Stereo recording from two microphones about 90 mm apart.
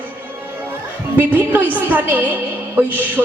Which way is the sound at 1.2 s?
20° right (ahead or behind).